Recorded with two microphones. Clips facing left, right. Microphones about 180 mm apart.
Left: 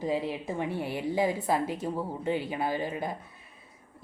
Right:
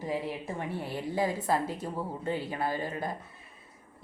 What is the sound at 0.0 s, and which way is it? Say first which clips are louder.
A woman's voice: left 3 dB; 20° left (ahead or behind).